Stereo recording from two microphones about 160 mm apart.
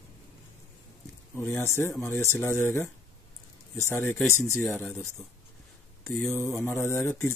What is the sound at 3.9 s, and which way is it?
Speech, 15° left (ahead or behind).